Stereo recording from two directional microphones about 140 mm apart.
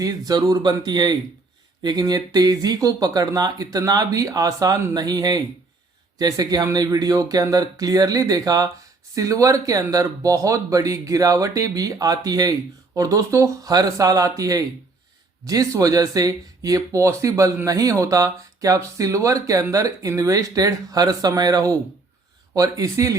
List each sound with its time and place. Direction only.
0.0 s speech: 25° right (ahead or behind)